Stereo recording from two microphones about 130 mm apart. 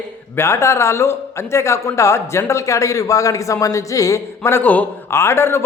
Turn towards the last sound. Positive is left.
turn(degrees=20)  # may be behind; listen again after turning